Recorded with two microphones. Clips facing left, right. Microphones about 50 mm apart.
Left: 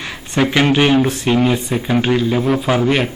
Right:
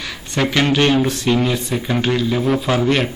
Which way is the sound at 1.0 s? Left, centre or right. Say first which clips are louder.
Left 2 dB; left.